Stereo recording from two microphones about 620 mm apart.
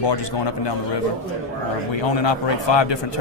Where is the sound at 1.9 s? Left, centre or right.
Left.